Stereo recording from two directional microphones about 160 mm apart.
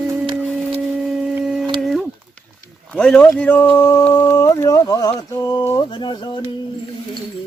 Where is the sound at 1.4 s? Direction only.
5° right (ahead or behind).